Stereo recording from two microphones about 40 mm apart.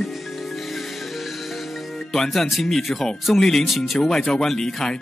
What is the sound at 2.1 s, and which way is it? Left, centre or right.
Speech, centre.